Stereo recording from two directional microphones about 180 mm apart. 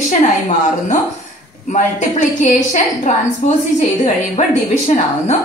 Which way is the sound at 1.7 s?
45° left (ahead or behind).